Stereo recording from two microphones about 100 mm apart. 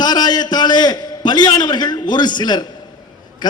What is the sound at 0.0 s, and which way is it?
A man's voice, 45° left (ahead or behind).